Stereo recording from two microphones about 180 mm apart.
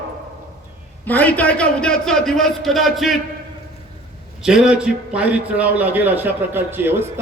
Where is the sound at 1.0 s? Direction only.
10° left (ahead or behind).